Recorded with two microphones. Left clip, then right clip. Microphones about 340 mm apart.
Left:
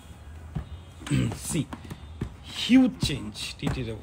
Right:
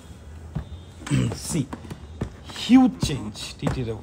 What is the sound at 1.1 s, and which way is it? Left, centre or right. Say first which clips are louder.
Speech: right 3 dB; centre.